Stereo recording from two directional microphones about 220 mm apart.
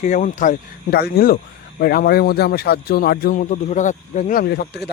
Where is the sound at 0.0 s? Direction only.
35° left (ahead or behind).